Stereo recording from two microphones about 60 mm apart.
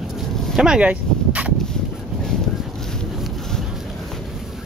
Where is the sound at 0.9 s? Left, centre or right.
Right.